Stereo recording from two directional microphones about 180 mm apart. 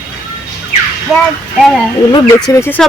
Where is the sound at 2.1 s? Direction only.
15° left (ahead or behind).